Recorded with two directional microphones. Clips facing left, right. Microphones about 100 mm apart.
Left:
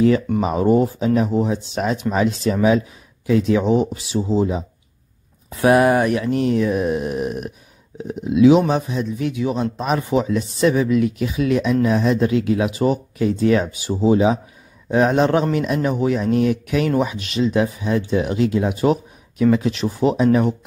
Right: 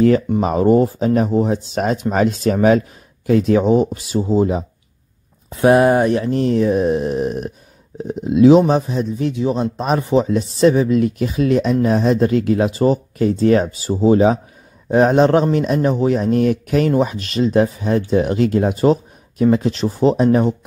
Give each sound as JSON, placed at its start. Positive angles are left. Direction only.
{"t": 0.4, "sound": "speech", "side_deg": -45}
{"t": 5.5, "sound": "speech", "side_deg": -30}